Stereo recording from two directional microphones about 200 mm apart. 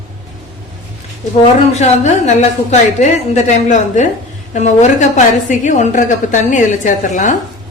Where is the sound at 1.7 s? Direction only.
35° left (ahead or behind).